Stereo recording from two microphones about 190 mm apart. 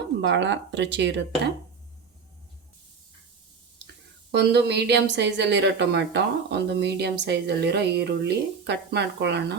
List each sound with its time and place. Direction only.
0.2 s speech: 70° right (ahead or behind)
4.3 s speech: 60° right (ahead or behind)